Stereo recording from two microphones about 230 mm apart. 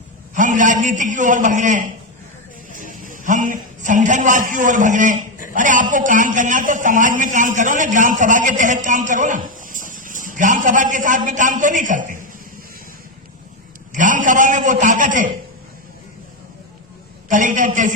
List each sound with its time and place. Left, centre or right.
0.3 s a man's voice: right
2.7 s music: right
3.2 s a man's voice: right
13.9 s a man's voice: right
17.2 s a man's voice: right